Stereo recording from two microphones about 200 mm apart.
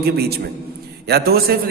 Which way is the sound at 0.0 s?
50° right (ahead or behind).